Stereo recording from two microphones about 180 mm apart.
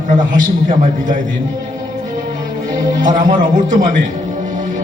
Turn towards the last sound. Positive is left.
turn(degrees=-45)  # may be behind; listen again after turning